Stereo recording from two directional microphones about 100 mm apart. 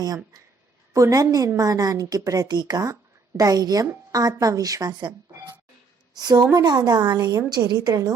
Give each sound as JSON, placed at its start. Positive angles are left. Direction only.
{"t": 0.9, "sound": "a woman's voice", "side_deg": -35}
{"t": 6.1, "sound": "a woman's voice", "side_deg": -40}